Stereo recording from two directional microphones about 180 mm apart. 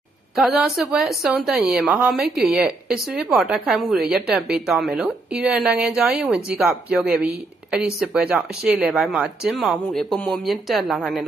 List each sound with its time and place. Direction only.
0.4 s a woman's voice: centre (ahead or behind)